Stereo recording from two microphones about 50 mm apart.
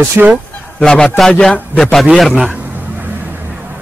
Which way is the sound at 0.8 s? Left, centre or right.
Centre.